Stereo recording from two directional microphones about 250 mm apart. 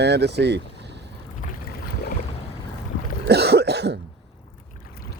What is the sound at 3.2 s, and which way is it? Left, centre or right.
Cough, right.